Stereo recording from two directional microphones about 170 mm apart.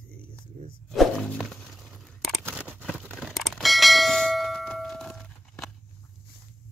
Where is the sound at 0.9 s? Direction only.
Centre (ahead or behind).